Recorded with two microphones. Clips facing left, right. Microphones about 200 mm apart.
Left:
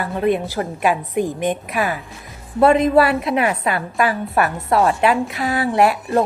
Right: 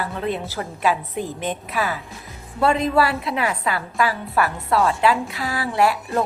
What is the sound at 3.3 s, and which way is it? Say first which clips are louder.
Speech: left 5 dB; 60° left (ahead or behind).